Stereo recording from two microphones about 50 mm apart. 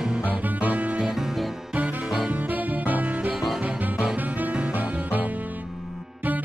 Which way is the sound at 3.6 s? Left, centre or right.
Right.